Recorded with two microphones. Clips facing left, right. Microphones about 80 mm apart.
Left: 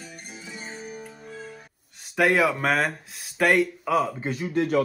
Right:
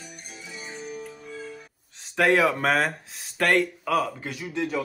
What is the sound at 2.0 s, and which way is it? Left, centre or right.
Speech, centre.